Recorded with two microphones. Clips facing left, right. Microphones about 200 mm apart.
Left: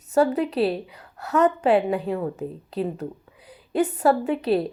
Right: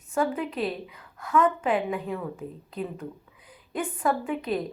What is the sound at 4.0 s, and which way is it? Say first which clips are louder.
Speech: left 3 dB; 70° left (ahead or behind).